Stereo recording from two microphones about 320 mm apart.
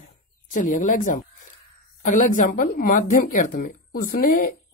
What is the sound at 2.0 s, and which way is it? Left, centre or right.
Speech, left.